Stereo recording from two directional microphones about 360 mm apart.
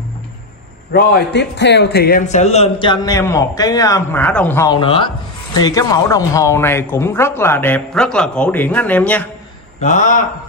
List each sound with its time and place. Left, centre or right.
0.9 s a man's voice: left; by 9.3 s centre
9.8 s a man's voice: centre